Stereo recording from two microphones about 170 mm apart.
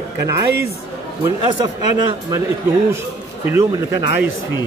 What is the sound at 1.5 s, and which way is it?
Speech, 25° right (ahead or behind).